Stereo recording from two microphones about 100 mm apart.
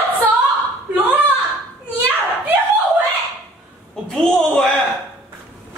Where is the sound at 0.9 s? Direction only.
15° right (ahead or behind).